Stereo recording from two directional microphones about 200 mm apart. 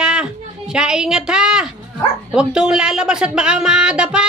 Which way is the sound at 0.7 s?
5° right (ahead or behind).